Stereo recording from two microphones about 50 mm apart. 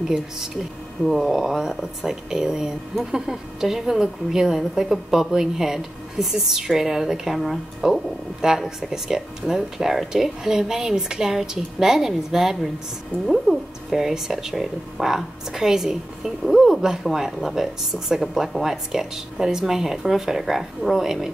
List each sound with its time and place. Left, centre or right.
1.0 s speech: centre